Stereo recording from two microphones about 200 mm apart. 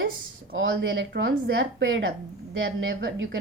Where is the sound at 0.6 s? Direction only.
60° right (ahead or behind).